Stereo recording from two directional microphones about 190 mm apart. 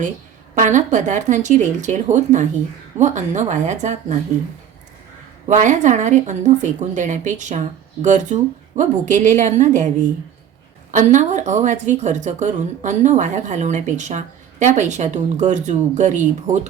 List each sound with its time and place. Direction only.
0.5 s speech: 40° right (ahead or behind)
5.5 s speech: 40° right (ahead or behind)
10.9 s speech: 40° right (ahead or behind)